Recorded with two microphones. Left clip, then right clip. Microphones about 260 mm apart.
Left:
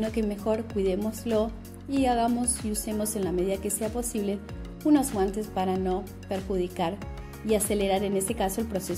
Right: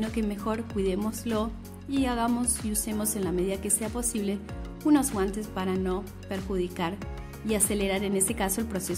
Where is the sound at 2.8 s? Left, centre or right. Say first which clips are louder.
Left 2 dB; centre.